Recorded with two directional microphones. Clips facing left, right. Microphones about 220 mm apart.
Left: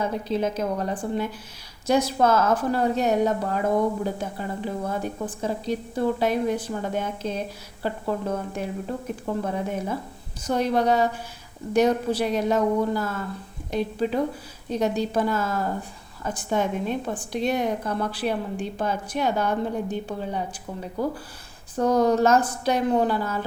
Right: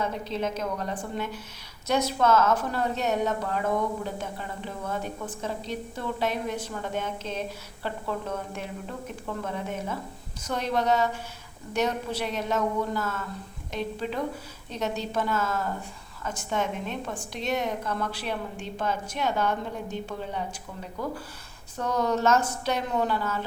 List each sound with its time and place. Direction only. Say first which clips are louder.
0.3 s a woman's voice: left 5 dB; 35° left (ahead or behind)
14.7 s a woman's voice: left 7 dB; 35° left (ahead or behind)